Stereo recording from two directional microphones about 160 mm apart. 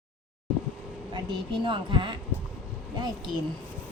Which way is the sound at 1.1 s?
30° right (ahead or behind).